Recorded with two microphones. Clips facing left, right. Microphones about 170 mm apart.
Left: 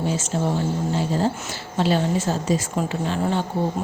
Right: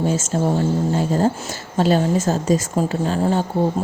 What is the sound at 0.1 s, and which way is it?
Speech, 45° right (ahead or behind).